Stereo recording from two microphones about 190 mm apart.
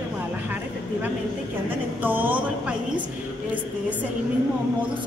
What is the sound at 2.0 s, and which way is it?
A woman's voice, 10° right (ahead or behind).